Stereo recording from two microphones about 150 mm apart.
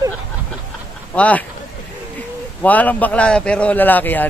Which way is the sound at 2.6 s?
10° left (ahead or behind).